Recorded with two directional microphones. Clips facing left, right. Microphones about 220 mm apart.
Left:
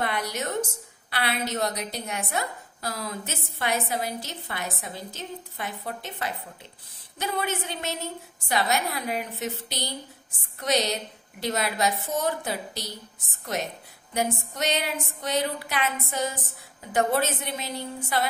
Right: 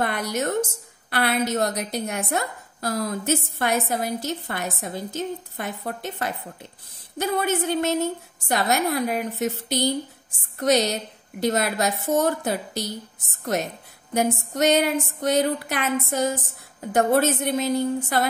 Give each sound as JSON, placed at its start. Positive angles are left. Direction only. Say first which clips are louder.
{"t": 0.0, "sound": "a woman's voice", "louder": "right 4 dB", "side_deg": -50}
{"t": 14.1, "sound": "a woman's voice", "louder": "right 5 dB", "side_deg": -45}